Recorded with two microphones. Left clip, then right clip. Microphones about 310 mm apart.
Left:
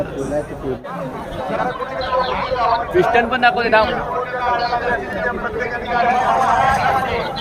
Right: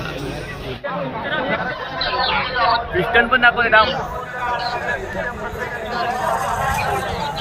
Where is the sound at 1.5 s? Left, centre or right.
Left.